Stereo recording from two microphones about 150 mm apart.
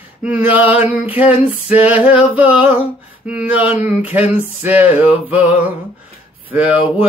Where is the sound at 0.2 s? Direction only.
10° right (ahead or behind).